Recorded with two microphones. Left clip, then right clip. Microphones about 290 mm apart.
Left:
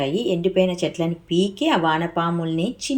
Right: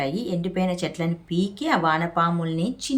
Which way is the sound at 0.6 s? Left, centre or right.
Right.